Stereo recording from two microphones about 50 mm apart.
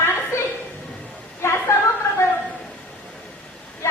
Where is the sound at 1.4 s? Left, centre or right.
Left.